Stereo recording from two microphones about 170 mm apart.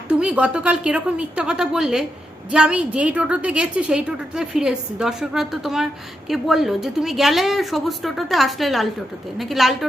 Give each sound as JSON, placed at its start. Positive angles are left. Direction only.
{"t": 0.1, "sound": "a woman's voice", "side_deg": -5}